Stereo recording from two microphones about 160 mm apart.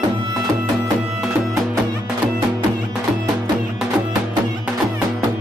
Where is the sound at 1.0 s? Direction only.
Centre (ahead or behind).